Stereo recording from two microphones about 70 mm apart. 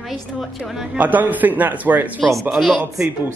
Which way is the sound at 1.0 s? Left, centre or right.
Right.